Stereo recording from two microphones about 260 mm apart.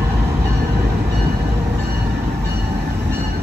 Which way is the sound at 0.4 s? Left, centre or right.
Right.